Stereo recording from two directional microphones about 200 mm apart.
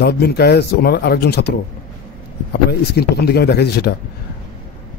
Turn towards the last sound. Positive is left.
turn(degrees=55)  # may be behind; listen again after turning